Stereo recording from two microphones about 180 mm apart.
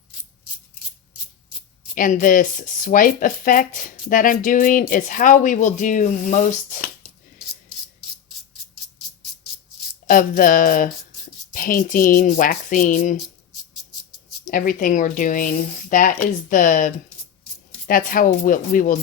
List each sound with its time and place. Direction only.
2.0 s speech: 50° left (ahead or behind)
10.1 s speech: 50° left (ahead or behind)
14.4 s speech: 50° left (ahead or behind)